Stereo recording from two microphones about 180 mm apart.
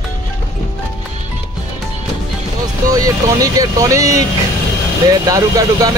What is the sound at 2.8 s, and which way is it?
Speech, 20° right (ahead or behind).